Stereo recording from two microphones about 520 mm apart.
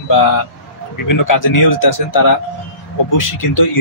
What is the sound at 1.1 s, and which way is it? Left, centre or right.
Speech, left.